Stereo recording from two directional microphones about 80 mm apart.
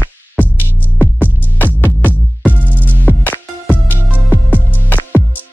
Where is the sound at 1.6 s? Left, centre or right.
Left.